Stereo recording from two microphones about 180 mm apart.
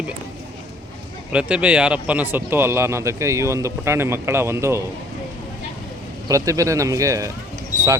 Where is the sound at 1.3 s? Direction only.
5° right (ahead or behind).